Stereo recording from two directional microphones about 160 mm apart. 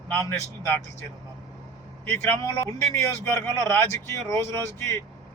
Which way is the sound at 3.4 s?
15° left (ahead or behind).